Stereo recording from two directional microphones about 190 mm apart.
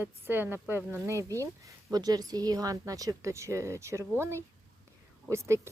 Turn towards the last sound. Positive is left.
turn(degrees=-15)  # may be behind; listen again after turning